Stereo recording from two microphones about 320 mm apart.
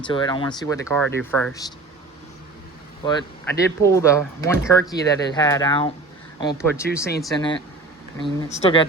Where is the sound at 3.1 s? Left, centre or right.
Centre.